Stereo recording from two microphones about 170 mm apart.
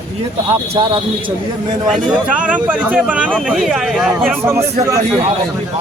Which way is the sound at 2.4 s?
10° right (ahead or behind).